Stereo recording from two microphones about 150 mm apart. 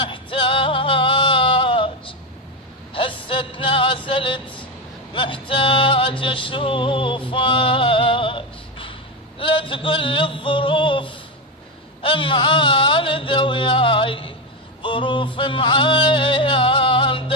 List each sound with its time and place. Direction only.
0.0 s music: 35° left (ahead or behind)
9.4 s yodeling: 35° left (ahead or behind)
12.0 s music: 35° left (ahead or behind)
14.8 s yodeling: 35° left (ahead or behind)